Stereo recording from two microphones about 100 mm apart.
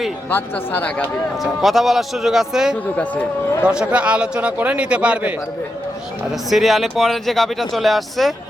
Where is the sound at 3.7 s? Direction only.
10° right (ahead or behind).